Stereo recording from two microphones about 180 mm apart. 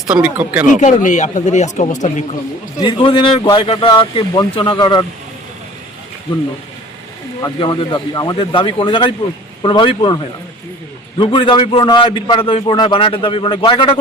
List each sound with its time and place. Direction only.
0.1 s speech: 10° right (ahead or behind)
0.8 s speech: 40° left (ahead or behind)
2.8 s a man's voice: 30° left (ahead or behind)
7.4 s a man's voice: 25° left (ahead or behind)
11.2 s a man's voice: 30° left (ahead or behind)